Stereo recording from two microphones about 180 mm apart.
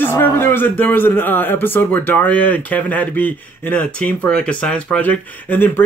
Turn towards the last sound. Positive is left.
turn(degrees=10)  # may be behind; listen again after turning